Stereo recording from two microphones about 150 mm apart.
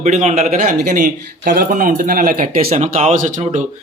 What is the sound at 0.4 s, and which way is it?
A man's voice, 65° right (ahead or behind).